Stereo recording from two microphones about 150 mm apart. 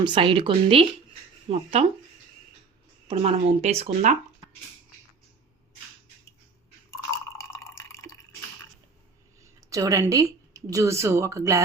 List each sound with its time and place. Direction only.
0.0 s speech: 35° right (ahead or behind)
3.1 s speech: 45° right (ahead or behind)
6.9 s drip: 20° left (ahead or behind)
9.6 s a woman's voice: 20° right (ahead or behind)